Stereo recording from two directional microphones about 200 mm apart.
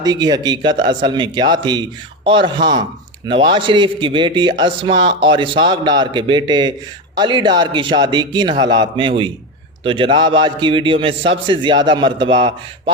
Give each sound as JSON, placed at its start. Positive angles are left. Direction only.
{"t": 0.0, "sound": "speech", "side_deg": -20}